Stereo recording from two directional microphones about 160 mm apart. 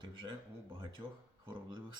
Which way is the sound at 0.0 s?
30° right (ahead or behind).